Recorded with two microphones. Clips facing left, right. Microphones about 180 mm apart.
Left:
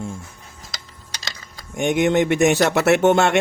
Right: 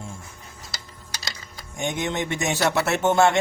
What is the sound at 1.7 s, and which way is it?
Speech, 65° left (ahead or behind).